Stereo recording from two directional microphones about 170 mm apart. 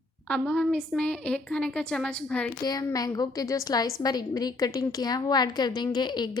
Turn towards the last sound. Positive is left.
turn(degrees=25)  # may be behind; listen again after turning